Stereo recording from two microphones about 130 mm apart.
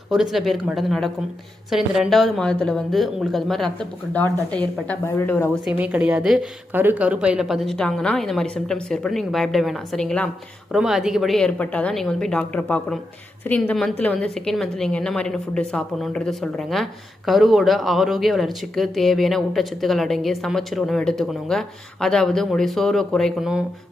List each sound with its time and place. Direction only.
0.1 s a woman's voice: 5° right (ahead or behind); by 5.5 s 20° left (ahead or behind)
5.7 s a woman's voice: 10° right (ahead or behind); by 10.2 s 5° left (ahead or behind)
10.7 s a woman's voice: 5° right (ahead or behind)